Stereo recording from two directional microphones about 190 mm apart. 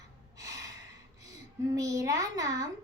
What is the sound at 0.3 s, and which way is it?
Gasp, 20° right (ahead or behind).